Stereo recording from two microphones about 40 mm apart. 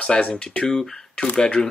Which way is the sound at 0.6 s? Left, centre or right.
Centre.